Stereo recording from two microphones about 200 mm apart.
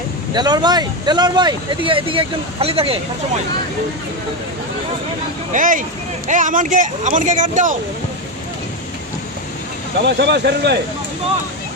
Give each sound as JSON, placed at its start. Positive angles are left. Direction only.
{"t": 0.3, "sound": "speech", "side_deg": -20}
{"t": 5.5, "sound": "speech", "side_deg": -40}
{"t": 10.1, "sound": "speech", "side_deg": -60}